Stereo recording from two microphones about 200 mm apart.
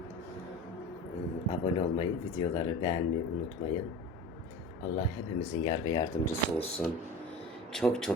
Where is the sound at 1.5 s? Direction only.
25° left (ahead or behind).